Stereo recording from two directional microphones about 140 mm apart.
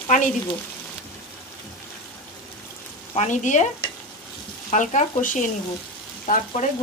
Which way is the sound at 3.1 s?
55° left (ahead or behind).